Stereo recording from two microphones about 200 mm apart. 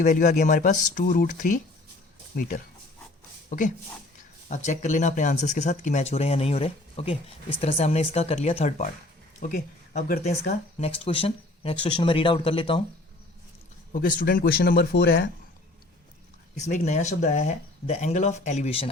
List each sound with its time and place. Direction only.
0.0 s speech: 40° left (ahead or behind)
4.4 s speech: 35° left (ahead or behind)
9.4 s speech: 45° left (ahead or behind); by 12.8 s 25° left (ahead or behind)
13.9 s speech: 45° left (ahead or behind)
16.6 s speech: 35° left (ahead or behind)